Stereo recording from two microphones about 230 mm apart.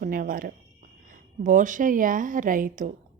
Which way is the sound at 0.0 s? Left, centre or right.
Right.